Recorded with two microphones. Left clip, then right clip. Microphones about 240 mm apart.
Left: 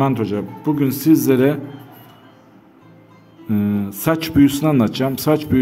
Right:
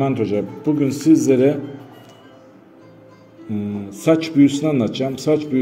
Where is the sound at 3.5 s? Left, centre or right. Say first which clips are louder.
Left 5 dB; left.